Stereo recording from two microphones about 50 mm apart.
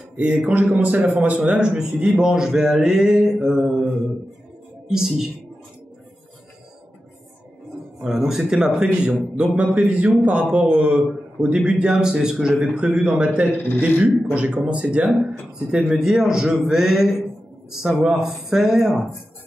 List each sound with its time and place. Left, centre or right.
0.1 s a man's voice: right
2.1 s speech: centre
8.0 s a man's voice: centre